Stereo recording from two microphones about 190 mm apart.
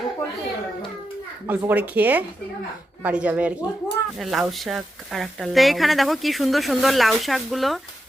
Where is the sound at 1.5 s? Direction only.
10° right (ahead or behind).